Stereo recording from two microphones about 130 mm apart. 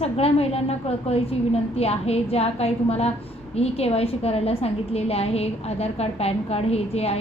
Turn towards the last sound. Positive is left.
turn(degrees=50)  # may be behind; listen again after turning